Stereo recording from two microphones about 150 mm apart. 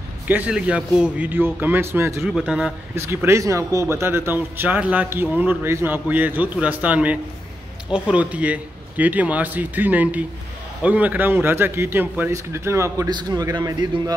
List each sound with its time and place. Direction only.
0.3 s a man's voice: 10° right (ahead or behind)
2.2 s a man's voice: 5° right (ahead or behind)
3.0 s a man's voice: 15° right (ahead or behind)